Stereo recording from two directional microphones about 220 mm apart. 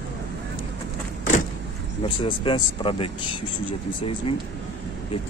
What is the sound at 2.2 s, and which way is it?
Speech, 25° left (ahead or behind).